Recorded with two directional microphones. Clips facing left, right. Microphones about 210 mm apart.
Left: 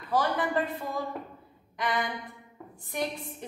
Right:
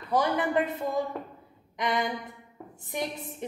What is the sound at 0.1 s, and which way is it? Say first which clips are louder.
A woman's voice: right 2 dB; 15° right (ahead or behind).